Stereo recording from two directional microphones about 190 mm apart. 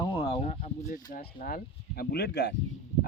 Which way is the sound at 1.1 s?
50° left (ahead or behind).